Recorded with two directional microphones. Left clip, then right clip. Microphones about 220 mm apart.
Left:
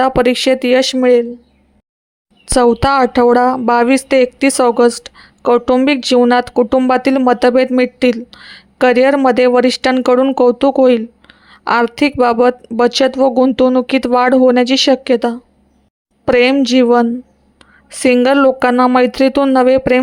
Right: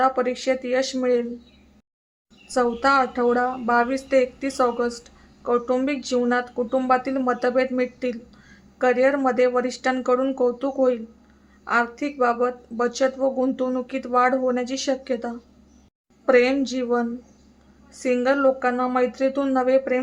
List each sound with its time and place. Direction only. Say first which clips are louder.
0.0 s speech: left 9 dB; 45° left (ahead or behind)
2.5 s speech: left 9 dB; 40° left (ahead or behind)